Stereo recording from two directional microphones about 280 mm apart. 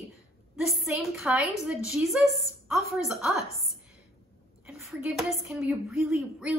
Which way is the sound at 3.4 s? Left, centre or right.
Left.